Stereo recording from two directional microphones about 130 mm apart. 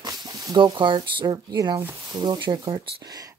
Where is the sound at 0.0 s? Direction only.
30° right (ahead or behind).